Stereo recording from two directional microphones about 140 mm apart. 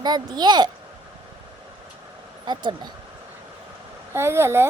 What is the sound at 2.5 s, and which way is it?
Speech, 30° right (ahead or behind).